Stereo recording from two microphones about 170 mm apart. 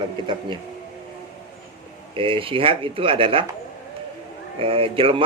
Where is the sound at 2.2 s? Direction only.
30° right (ahead or behind).